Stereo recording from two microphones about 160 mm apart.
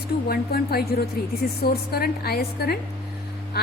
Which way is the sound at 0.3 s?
75° left (ahead or behind).